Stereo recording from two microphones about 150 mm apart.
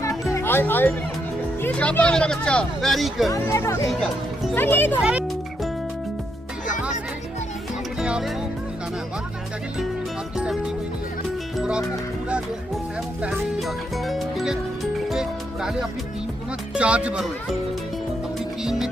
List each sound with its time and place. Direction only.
0.0 s music: 20° left (ahead or behind)
1.6 s speech: 10° left (ahead or behind)
3.2 s speech: 20° left (ahead or behind)
7.9 s music: 5° right (ahead or behind)
10.3 s music: 5° right (ahead or behind)
13.2 s music: centre (ahead or behind)
16.7 s speech: 10° right (ahead or behind)
18.3 s music: 5° right (ahead or behind)